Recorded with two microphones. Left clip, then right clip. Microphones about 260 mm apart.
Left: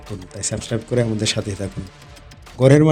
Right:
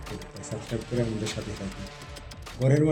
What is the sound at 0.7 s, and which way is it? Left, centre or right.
Speech, left.